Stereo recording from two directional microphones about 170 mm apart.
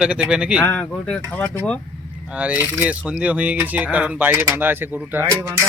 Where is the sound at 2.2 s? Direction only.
5° right (ahead or behind).